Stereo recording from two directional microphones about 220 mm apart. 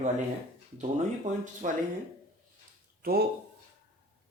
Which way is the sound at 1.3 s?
35° right (ahead or behind).